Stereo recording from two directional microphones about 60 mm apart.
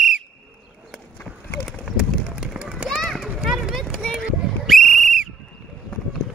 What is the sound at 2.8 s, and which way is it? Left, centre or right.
Children playing, centre.